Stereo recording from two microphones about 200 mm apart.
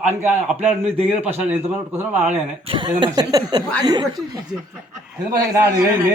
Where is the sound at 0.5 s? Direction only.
30° right (ahead or behind).